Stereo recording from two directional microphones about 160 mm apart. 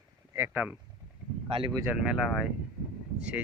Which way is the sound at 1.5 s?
35° right (ahead or behind).